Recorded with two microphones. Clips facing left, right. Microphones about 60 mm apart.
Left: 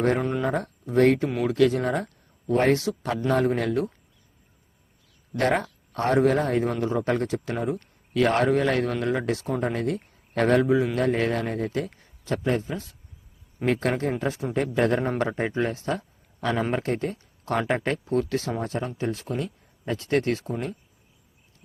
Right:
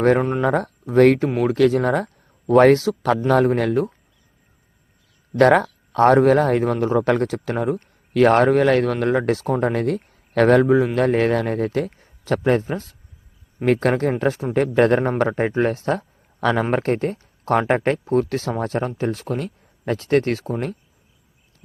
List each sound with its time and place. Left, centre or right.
0.2 s speech: right
0.4 s speech: right
2.5 s speech: right
5.4 s speech: right
6.6 s speech: right
6.8 s a man's voice: right
11.9 s a sound: right
12.3 s a man's voice: right
16.7 s speech: right
18.9 s speech: right